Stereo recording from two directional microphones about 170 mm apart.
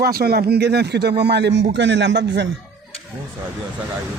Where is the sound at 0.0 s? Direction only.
65° right (ahead or behind); by 2.5 s 90° right.